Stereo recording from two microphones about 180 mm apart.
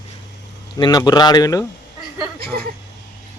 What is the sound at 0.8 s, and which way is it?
Speech, 25° left (ahead or behind).